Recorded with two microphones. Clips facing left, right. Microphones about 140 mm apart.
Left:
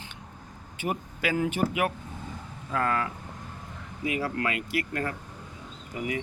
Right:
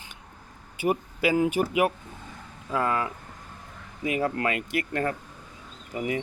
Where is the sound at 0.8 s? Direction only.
10° right (ahead or behind).